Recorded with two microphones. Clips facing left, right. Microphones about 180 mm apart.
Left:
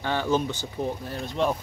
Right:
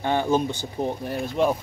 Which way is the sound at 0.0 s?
15° right (ahead or behind).